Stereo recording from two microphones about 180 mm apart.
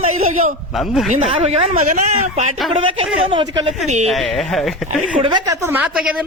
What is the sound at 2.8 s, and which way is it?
Speech, 30° right (ahead or behind).